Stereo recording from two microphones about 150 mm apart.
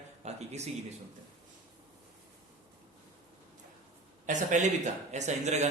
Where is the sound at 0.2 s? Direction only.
45° right (ahead or behind).